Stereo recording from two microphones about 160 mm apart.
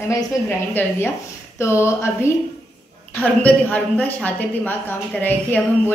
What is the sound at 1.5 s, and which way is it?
A woman's voice, 15° left (ahead or behind).